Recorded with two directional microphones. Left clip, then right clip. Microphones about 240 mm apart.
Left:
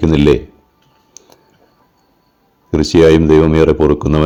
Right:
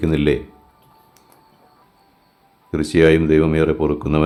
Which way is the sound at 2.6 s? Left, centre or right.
Left.